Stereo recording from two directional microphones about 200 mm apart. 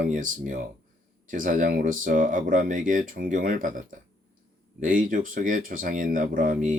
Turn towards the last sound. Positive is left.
turn(degrees=-40)  # may be behind; listen again after turning